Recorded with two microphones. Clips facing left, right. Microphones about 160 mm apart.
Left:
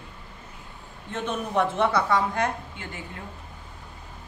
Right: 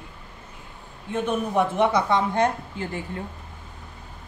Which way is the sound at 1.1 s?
10° right (ahead or behind).